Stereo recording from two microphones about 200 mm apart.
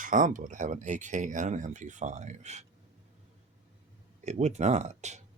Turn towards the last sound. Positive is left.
turn(degrees=-35)  # may be behind; listen again after turning